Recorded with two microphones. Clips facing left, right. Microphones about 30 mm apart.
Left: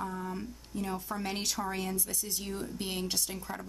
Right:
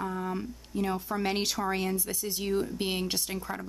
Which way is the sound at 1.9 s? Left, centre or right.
Centre.